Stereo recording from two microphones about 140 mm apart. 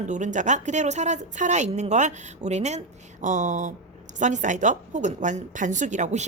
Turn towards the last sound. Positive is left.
turn(degrees=-55)  # may be behind; listen again after turning